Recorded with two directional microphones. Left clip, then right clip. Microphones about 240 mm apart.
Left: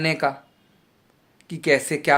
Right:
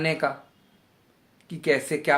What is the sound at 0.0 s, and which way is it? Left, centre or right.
Speech, left.